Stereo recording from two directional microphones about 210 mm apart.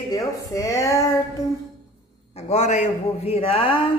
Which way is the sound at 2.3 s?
35° left (ahead or behind).